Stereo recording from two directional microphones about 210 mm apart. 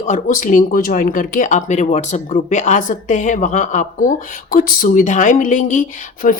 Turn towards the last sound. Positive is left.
turn(degrees=40)  # may be behind; listen again after turning